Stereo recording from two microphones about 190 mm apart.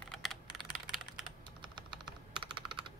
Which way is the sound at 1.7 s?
25° right (ahead or behind).